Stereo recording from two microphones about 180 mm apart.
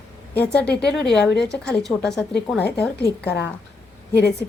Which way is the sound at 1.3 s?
70° left (ahead or behind).